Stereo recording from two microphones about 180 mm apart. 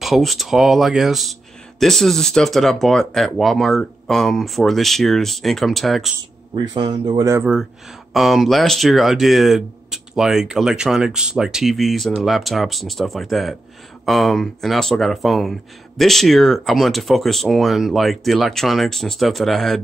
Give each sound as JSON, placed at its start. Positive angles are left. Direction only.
{"t": 0.0, "sound": "speech", "side_deg": 0}
{"t": 6.5, "sound": "speech", "side_deg": -25}
{"t": 8.1, "sound": "speech", "side_deg": 0}